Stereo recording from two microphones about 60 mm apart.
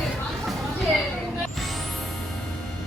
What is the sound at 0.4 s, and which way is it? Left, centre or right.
Chatter, centre.